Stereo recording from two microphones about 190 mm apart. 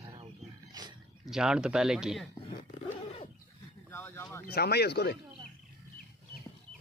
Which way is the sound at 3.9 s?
10° left (ahead or behind).